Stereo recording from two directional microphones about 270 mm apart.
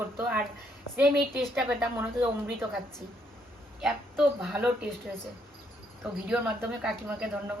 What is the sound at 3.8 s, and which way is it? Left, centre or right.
Speech, centre.